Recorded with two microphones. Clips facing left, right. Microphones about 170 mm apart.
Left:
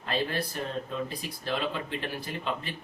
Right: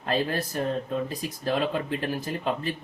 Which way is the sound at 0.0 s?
45° right (ahead or behind).